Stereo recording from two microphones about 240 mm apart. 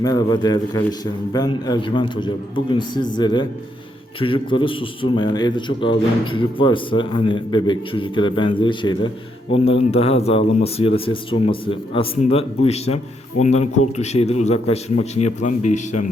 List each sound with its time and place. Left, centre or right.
0.0 s a man's voice: centre